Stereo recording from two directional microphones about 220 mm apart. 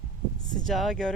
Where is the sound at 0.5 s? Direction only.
Centre (ahead or behind).